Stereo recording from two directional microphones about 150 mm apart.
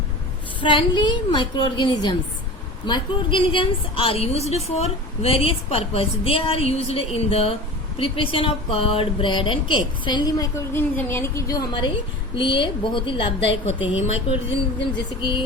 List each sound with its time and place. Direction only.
0.6 s a woman's voice: 35° left (ahead or behind)